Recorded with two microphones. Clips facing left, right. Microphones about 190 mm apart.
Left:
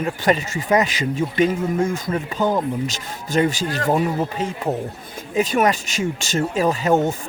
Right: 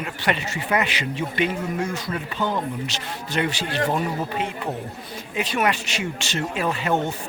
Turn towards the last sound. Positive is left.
turn(degrees=40)  # may be behind; listen again after turning